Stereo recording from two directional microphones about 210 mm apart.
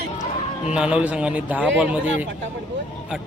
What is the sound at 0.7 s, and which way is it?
Speech, 5° right (ahead or behind).